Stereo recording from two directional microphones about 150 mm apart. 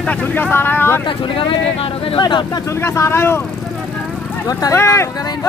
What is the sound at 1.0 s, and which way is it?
Speech, 35° left (ahead or behind).